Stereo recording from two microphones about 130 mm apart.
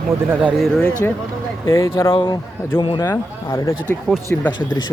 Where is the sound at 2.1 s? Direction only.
35° left (ahead or behind).